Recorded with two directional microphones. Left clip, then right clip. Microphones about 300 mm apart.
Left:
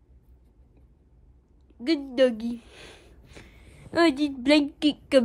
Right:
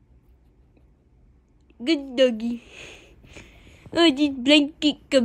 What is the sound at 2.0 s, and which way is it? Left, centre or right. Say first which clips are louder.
A woman's voice: right 2 dB; centre.